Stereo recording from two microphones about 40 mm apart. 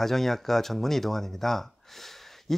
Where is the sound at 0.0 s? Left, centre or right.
Centre.